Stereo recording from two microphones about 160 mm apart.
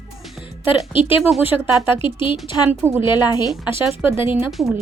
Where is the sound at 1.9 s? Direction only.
30° left (ahead or behind).